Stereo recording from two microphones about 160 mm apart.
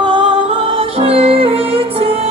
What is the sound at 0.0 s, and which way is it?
Music, 30° right (ahead or behind).